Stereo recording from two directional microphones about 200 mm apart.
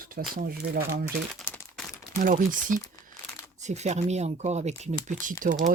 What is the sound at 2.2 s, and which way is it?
Speech, 40° right (ahead or behind).